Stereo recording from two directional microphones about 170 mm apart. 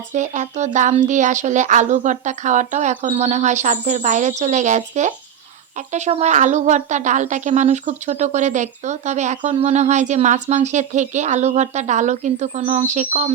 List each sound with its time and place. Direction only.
0.1 s a woman's voice: 45° right (ahead or behind)